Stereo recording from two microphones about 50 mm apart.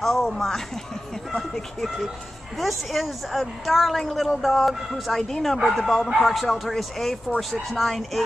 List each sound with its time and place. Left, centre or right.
0.0 s a woman's voice: centre